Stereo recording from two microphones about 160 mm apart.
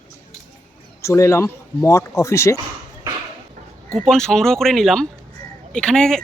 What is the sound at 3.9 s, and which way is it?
Speech, 5° left (ahead or behind).